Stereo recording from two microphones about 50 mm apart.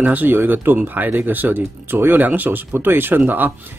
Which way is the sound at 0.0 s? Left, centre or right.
Right.